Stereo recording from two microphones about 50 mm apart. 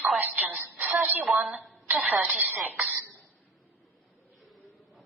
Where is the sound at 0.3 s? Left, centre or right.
Right.